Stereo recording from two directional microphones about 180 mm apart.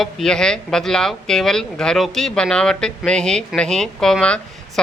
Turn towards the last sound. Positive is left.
turn(degrees=5)  # may be behind; listen again after turning